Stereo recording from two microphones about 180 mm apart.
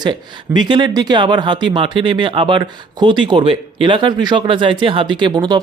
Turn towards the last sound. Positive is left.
turn(degrees=-25)  # may be behind; listen again after turning